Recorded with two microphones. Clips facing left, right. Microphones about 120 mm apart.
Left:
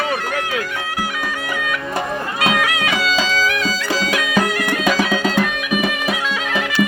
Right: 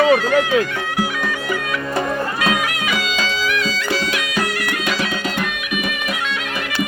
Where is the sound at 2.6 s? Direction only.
90° left.